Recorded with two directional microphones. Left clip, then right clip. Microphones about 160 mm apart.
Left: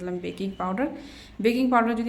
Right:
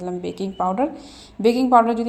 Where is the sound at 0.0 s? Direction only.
15° right (ahead or behind).